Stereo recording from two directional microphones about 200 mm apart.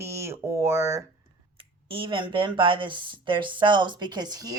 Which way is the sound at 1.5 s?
25° right (ahead or behind).